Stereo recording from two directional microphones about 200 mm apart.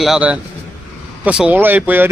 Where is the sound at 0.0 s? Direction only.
5° right (ahead or behind).